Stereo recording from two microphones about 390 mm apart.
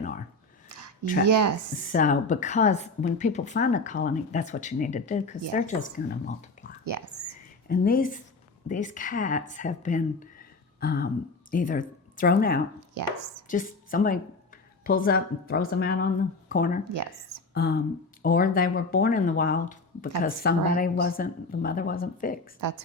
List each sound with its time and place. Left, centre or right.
0.0 s a sound: centre
1.3 s speech: right
1.9 s a woman's voice: centre
6.8 s speech: right
7.7 s a woman's voice: left
12.9 s chopping: right
13.5 s a woman's voice: left
16.9 s speech: right
17.5 s a woman's voice: left